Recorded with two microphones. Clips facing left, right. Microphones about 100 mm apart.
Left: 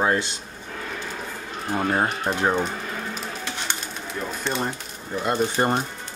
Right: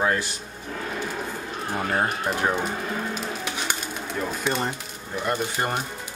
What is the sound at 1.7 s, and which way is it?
Speech, 20° left (ahead or behind).